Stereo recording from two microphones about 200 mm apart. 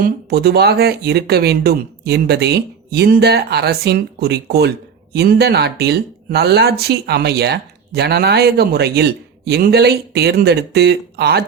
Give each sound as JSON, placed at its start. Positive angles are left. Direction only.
{"t": 0.0, "sound": "speech", "side_deg": -50}